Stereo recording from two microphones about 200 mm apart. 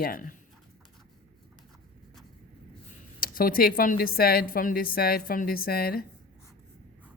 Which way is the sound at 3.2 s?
45° left (ahead or behind).